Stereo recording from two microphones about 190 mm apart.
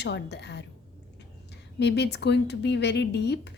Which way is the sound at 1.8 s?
60° left (ahead or behind).